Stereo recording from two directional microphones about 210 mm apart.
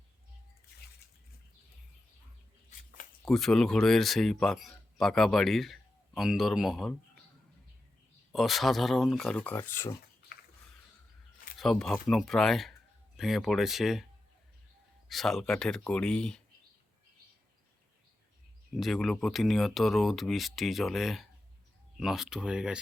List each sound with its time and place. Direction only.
3.2 s speech: centre (ahead or behind)
8.3 s speech: centre (ahead or behind)
11.5 s speech: centre (ahead or behind)
15.1 s speech: centre (ahead or behind)
18.8 s speech: centre (ahead or behind)